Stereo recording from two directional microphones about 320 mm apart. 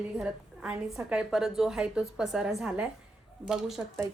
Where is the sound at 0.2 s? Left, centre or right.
Centre.